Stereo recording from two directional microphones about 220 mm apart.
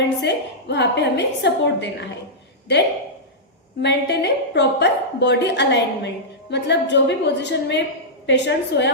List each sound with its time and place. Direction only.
0.0 s a woman's voice: 50° left (ahead or behind)
3.8 s a woman's voice: 50° left (ahead or behind)